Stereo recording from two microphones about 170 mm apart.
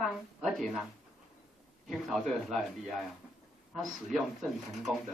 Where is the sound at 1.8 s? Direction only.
Centre (ahead or behind).